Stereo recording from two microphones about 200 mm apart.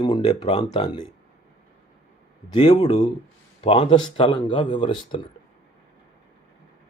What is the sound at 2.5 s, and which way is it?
Speech, 25° left (ahead or behind).